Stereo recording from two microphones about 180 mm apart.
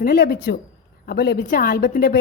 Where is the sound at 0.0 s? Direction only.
60° left (ahead or behind).